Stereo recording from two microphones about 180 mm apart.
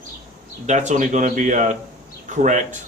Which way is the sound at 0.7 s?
40° right (ahead or behind).